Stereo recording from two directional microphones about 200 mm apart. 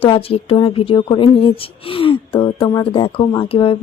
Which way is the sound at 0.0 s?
30° left (ahead or behind).